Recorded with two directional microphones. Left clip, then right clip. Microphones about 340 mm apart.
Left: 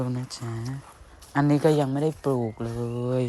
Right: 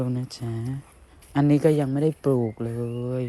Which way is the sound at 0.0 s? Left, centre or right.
Centre.